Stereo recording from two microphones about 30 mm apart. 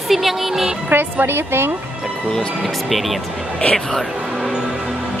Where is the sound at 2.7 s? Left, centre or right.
Centre.